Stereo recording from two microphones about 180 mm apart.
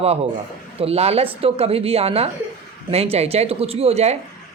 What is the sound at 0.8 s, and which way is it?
Speech, 35° right (ahead or behind).